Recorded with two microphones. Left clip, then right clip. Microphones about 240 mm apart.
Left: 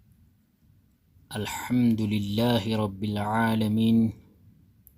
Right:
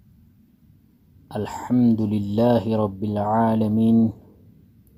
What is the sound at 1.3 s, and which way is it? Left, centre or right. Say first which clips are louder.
Speech: right 5 dB; left.